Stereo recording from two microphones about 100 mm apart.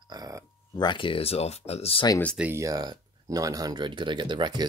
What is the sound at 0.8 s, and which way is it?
Speech, 55° left (ahead or behind).